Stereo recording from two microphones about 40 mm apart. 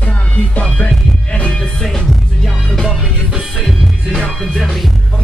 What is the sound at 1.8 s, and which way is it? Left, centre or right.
Music, centre.